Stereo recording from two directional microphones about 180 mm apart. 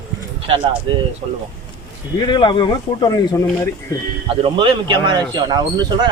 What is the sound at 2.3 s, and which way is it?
Speech, 25° left (ahead or behind).